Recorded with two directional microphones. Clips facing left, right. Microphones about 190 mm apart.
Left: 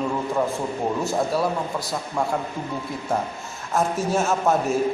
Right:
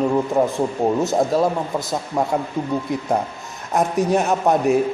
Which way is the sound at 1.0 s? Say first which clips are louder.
Right 4 dB; 20° right (ahead or behind).